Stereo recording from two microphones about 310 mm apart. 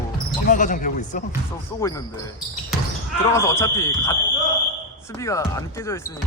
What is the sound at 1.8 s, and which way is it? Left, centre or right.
Speech, centre.